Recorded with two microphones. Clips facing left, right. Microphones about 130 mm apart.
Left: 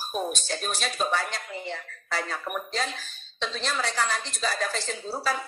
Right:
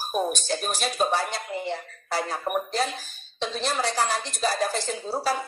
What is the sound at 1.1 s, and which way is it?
Speech, 35° right (ahead or behind).